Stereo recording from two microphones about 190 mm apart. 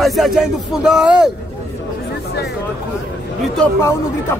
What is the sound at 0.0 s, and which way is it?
Speech, centre (ahead or behind).